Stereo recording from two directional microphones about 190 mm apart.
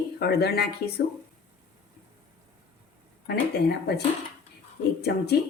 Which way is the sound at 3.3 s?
55° left (ahead or behind).